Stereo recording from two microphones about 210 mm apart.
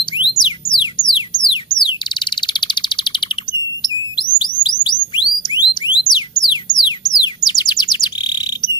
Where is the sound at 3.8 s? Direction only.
20° left (ahead or behind).